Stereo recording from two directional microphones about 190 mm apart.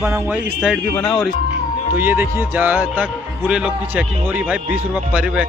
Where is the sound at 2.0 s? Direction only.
10° right (ahead or behind).